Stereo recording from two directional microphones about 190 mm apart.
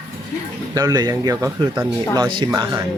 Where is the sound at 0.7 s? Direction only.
20° right (ahead or behind).